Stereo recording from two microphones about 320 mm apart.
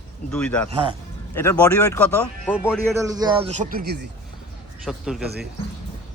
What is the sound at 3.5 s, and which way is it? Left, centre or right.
Speech, right.